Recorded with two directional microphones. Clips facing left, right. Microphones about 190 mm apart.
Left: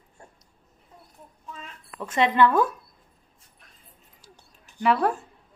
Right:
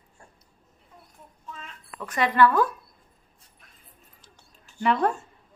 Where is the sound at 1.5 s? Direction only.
20° left (ahead or behind).